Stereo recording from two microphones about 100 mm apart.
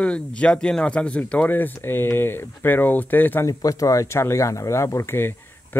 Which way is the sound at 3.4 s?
35° left (ahead or behind).